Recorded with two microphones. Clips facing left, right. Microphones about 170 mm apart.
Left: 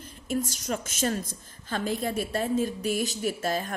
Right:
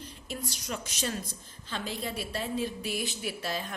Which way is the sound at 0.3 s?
45° left (ahead or behind).